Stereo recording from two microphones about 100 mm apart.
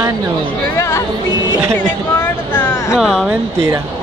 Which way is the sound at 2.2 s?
15° left (ahead or behind).